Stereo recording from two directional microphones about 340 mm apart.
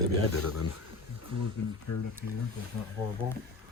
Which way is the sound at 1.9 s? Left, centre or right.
Left.